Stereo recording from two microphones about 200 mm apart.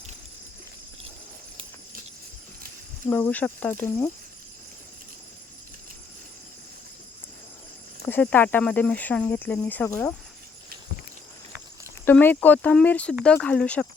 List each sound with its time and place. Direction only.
3.1 s speech: 10° left (ahead or behind)
8.0 s speech: 10° left (ahead or behind)
12.0 s speech: 10° left (ahead or behind)